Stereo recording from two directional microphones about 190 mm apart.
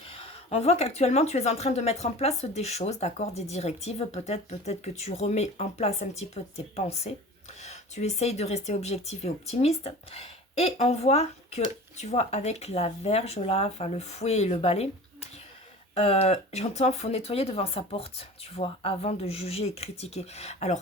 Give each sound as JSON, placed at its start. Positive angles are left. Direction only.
{"t": 0.1, "sound": "speech", "side_deg": 30}